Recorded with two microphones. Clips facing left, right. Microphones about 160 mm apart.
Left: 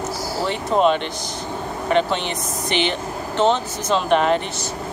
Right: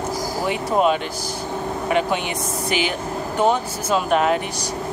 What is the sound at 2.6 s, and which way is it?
Speech, 5° right (ahead or behind).